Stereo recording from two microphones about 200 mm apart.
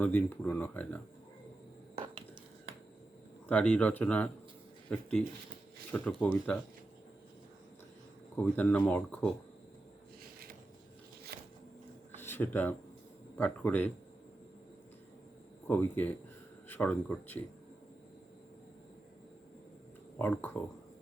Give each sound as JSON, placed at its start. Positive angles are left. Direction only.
{"t": 0.0, "sound": "speech", "side_deg": 10}
{"t": 3.5, "sound": "speech", "side_deg": 5}
{"t": 8.4, "sound": "speech", "side_deg": 10}
{"t": 12.2, "sound": "speech", "side_deg": 10}
{"t": 15.6, "sound": "speech", "side_deg": 10}
{"t": 20.1, "sound": "speech", "side_deg": 10}